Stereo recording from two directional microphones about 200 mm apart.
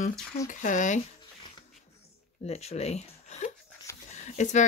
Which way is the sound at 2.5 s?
30° left (ahead or behind).